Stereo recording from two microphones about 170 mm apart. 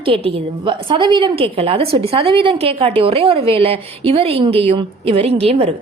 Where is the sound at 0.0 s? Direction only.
30° right (ahead or behind).